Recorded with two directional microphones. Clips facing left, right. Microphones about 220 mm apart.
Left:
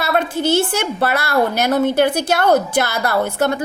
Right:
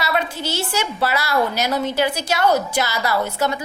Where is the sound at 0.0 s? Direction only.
50° left (ahead or behind).